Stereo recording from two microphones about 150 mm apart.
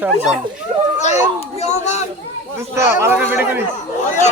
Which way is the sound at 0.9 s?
50° left (ahead or behind).